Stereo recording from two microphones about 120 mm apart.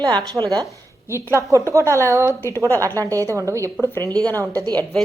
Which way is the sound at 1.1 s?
25° right (ahead or behind).